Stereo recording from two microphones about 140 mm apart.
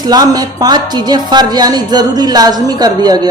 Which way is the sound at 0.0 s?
30° right (ahead or behind).